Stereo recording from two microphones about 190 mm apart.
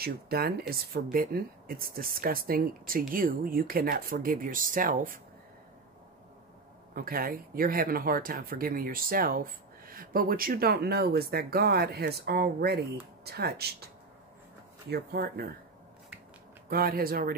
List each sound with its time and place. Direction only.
0.0 s speech: 55° right (ahead or behind)
7.0 s speech: 50° right (ahead or behind)
14.9 s speech: 55° right (ahead or behind)
16.6 s speech: 50° right (ahead or behind)